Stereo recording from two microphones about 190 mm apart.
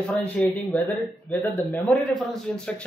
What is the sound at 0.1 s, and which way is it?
A man's voice, 5° left (ahead or behind).